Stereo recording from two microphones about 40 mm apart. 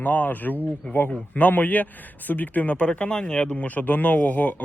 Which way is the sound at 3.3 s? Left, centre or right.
Left.